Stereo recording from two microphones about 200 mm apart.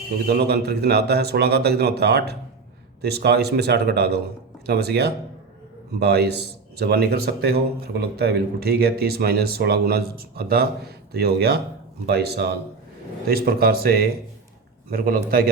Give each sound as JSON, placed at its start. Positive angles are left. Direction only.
{"t": 0.3, "sound": "a man's voice", "side_deg": -55}